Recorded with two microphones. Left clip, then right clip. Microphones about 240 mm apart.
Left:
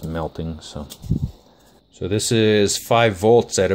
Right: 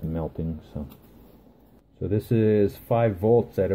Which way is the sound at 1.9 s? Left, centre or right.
Centre.